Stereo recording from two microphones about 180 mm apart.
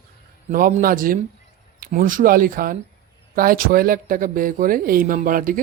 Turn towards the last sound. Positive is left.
turn(degrees=-50)  # may be behind; listen again after turning